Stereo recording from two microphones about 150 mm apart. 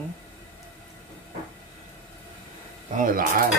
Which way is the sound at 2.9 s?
65° right (ahead or behind).